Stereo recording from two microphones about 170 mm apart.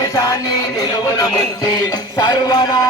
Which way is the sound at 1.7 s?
25° left (ahead or behind).